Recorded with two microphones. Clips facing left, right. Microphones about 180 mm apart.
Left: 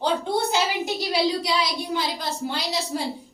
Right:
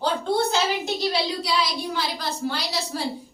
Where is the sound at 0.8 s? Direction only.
10° left (ahead or behind).